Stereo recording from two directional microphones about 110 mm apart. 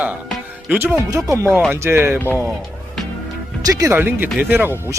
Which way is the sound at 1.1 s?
30° right (ahead or behind).